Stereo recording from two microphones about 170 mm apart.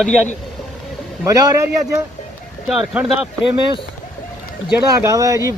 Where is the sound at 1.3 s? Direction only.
20° right (ahead or behind).